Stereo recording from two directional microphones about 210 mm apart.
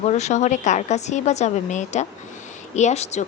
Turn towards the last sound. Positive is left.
turn(degrees=30)  # may be behind; listen again after turning